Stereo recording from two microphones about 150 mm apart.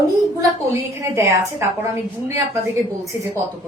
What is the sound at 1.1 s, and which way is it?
Speech, 20° right (ahead or behind).